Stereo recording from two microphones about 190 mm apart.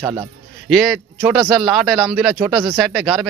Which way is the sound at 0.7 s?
Centre (ahead or behind).